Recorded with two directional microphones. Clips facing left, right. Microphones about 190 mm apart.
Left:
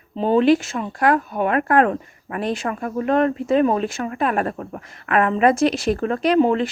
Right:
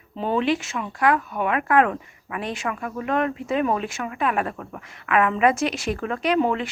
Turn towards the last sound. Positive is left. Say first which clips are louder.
# left 5 dB
turn(degrees=35)  # may be behind; listen again after turning